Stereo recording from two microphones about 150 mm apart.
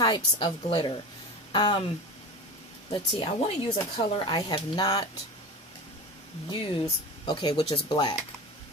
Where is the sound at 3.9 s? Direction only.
40° left (ahead or behind).